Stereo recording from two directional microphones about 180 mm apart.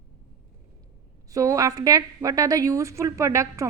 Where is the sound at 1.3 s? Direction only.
15° right (ahead or behind).